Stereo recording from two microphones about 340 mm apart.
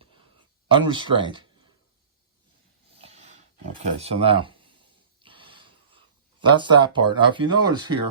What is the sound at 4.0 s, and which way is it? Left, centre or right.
Speech, centre.